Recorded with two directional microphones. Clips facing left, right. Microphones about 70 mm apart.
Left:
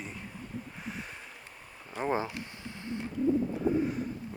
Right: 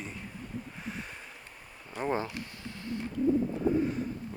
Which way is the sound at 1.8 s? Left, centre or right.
Centre.